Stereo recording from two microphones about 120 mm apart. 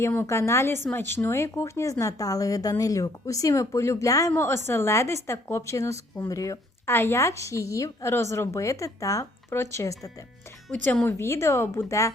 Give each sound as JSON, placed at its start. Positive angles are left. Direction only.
{"t": 0.0, "sound": "a woman's voice", "side_deg": 20}
{"t": 10.7, "sound": "a woman's voice", "side_deg": 10}